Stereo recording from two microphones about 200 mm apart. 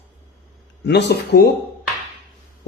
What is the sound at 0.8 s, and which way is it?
Speech, 55° left (ahead or behind).